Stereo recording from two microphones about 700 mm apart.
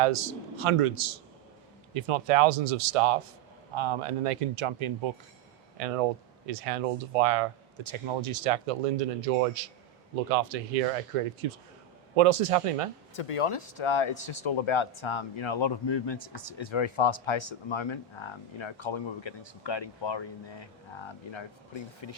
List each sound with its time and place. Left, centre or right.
0.0 s speech: right
7.2 s speech: right
13.1 s speech: left